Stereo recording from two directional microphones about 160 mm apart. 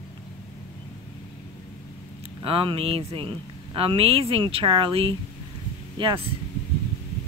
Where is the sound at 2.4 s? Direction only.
35° right (ahead or behind).